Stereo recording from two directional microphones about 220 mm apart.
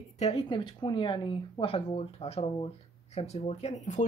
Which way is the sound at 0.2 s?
25° left (ahead or behind).